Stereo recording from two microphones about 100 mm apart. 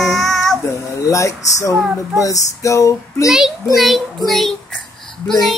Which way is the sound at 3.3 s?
5° right (ahead or behind).